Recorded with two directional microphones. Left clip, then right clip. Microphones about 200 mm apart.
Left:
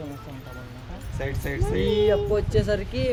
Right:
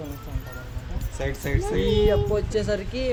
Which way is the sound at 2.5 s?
15° left (ahead or behind).